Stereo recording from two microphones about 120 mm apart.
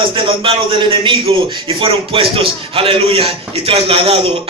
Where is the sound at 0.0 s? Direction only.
45° right (ahead or behind).